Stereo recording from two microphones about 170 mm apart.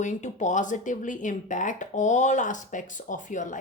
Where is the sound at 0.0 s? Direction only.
45° left (ahead or behind).